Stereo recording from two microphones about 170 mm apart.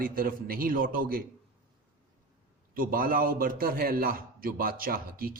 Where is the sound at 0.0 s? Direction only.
60° right (ahead or behind).